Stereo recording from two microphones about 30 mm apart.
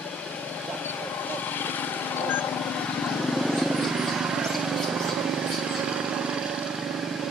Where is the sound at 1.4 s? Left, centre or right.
Left.